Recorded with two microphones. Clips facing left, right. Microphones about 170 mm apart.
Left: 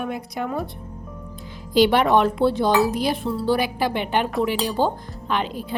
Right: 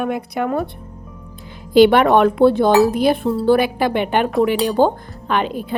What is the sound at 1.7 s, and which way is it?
Speech, 55° right (ahead or behind).